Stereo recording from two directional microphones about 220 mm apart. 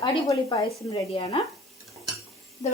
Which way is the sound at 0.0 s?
20° left (ahead or behind).